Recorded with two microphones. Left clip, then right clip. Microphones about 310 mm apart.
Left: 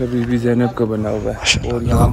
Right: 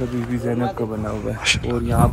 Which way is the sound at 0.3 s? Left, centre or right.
Left.